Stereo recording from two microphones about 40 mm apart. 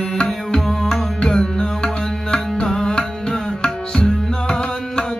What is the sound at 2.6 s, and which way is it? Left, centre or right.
Tabla, centre.